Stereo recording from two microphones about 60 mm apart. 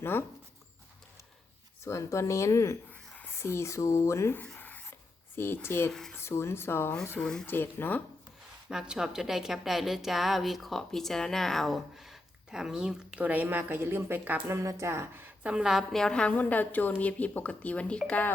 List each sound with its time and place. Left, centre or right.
0.0 s speech: left
1.8 s speech: left
4.4 s writing: left
5.6 s speech: left
7.2 s a woman's voice: centre
7.4 s speech: left
8.7 s a woman's voice: centre
13.1 s speech: right
14.4 s a woman's voice: right
15.4 s a woman's voice: centre
15.7 s a woman's voice: centre
16.3 s speech: left